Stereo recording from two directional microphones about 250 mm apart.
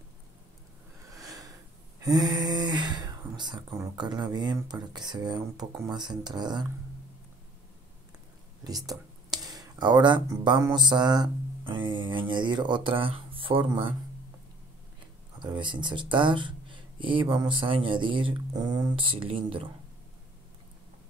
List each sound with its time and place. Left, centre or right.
1.1 s a sound: centre
2.0 s speech: centre
8.6 s speech: centre
15.3 s speech: centre